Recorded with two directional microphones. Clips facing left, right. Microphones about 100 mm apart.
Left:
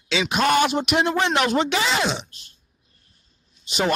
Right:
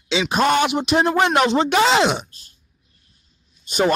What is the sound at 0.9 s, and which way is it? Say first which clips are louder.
Speech: right 3 dB; 40° right (ahead or behind).